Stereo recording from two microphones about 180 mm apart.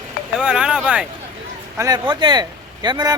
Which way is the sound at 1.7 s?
20° right (ahead or behind).